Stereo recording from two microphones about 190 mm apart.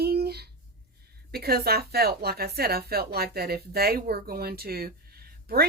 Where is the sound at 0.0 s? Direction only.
55° right (ahead or behind).